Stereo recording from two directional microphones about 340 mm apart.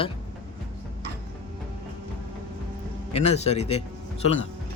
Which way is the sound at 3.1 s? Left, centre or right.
Centre.